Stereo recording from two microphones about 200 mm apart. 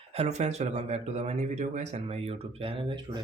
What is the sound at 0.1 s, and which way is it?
Speech, 35° right (ahead or behind).